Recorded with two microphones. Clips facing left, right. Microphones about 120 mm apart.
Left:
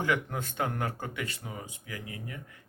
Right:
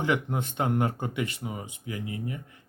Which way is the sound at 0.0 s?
20° right (ahead or behind).